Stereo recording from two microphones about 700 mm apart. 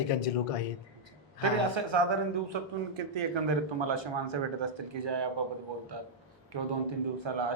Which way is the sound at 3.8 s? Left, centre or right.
Right.